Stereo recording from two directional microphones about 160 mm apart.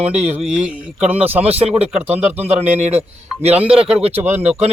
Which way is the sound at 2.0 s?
10° right (ahead or behind).